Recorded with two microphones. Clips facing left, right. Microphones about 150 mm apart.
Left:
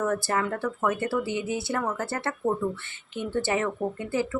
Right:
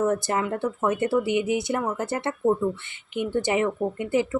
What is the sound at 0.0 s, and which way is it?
Speech, 20° right (ahead or behind).